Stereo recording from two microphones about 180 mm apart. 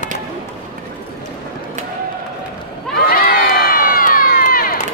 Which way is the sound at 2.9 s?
55° left (ahead or behind).